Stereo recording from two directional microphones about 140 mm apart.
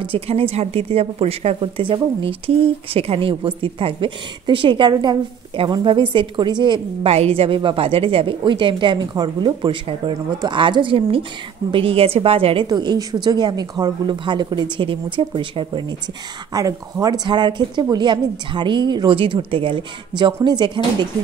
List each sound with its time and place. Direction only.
0.0 s a woman's voice: 40° right (ahead or behind)
12.6 s a woman's voice: 30° right (ahead or behind)
16.5 s a woman's voice: 25° right (ahead or behind)